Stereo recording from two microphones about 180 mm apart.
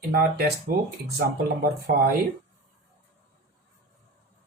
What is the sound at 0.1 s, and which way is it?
Speech, 60° right (ahead or behind).